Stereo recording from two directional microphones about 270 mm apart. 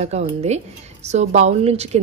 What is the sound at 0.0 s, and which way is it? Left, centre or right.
A woman's voice, right.